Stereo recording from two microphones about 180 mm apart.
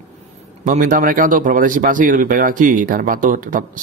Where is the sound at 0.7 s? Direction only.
50° right (ahead or behind).